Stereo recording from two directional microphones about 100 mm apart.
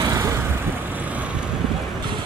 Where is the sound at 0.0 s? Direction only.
35° right (ahead or behind).